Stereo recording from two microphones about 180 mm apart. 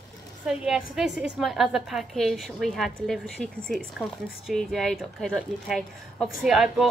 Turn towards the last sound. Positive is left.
turn(degrees=-5)  # may be behind; listen again after turning